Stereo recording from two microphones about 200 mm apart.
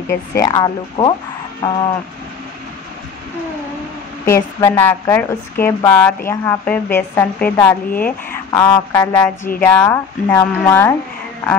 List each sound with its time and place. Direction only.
0.3 s speech: 15° left (ahead or behind)
4.3 s a woman's voice: 15° left (ahead or behind)